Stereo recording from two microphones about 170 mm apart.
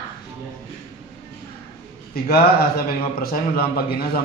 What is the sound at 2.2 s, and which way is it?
A man's voice, 65° left (ahead or behind).